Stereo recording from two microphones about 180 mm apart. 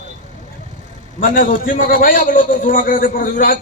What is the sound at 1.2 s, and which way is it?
A man's voice, 50° left (ahead or behind).